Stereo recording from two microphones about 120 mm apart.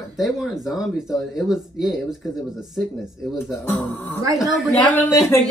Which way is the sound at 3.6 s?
15° left (ahead or behind).